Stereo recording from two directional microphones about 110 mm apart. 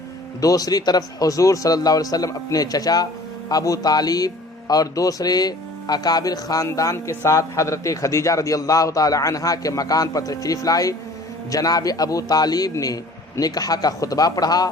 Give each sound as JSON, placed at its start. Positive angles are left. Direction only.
{"t": 0.4, "sound": "speech", "side_deg": 35}